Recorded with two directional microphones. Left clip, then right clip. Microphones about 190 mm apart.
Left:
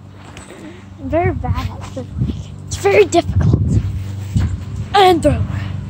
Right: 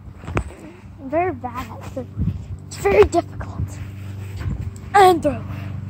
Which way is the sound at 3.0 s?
5° left (ahead or behind).